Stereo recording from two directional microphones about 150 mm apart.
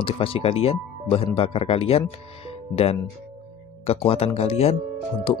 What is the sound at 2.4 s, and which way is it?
Music, 40° left (ahead or behind).